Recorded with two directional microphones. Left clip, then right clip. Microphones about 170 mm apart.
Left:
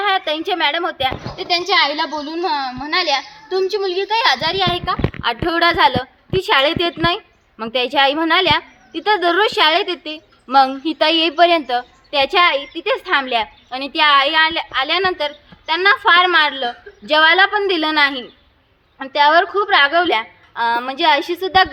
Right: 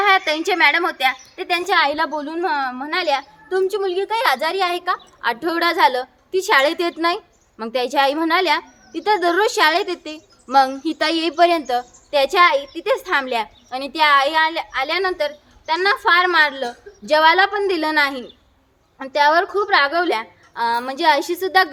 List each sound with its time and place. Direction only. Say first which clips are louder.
0.0 s a woman's voice: right 2 dB; 30° left (ahead or behind)
1.5 s a woman's voice: left 2 dB; 10° right (ahead or behind)
4.7 s a woman's voice: left 2 dB; 10° left (ahead or behind); by 21.7 s 5° right (ahead or behind)